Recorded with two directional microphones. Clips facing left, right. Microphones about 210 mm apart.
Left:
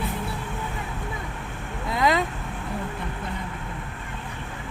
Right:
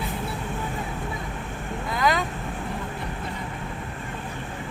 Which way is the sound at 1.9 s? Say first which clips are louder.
Left 2 dB; 25° left (ahead or behind).